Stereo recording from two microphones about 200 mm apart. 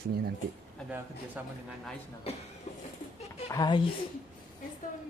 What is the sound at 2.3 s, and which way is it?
Speech, 30° left (ahead or behind).